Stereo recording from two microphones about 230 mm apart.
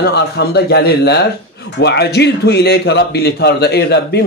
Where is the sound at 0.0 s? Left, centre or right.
Left.